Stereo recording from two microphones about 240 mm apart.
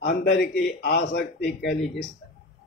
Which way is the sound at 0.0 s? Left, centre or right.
Left.